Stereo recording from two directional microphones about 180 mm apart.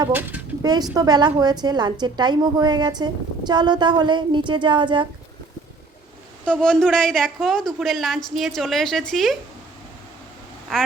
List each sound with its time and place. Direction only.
0.1 s speech: 10° right (ahead or behind)
0.6 s a woman's voice: 20° right (ahead or behind)
6.4 s a woman's voice: 5° left (ahead or behind)